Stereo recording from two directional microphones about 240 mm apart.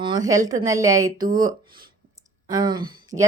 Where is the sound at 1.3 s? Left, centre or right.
Right.